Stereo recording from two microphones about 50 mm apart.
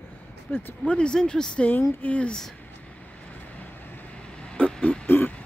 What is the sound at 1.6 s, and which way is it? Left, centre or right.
Speech, left.